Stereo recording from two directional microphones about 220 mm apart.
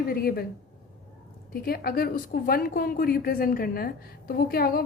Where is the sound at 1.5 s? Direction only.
45° left (ahead or behind).